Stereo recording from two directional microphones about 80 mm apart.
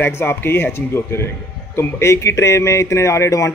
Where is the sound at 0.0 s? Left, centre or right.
Left.